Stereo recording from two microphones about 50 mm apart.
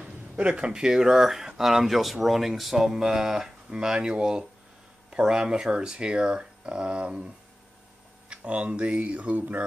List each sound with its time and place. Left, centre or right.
0.0 s speech: right
8.3 s speech: right